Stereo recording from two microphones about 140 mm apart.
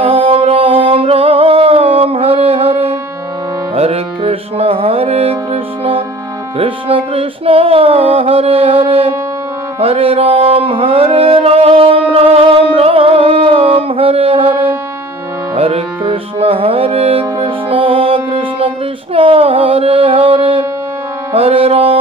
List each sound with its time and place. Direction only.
0.0 s music: 40° right (ahead or behind)
15.5 s music: 45° right (ahead or behind)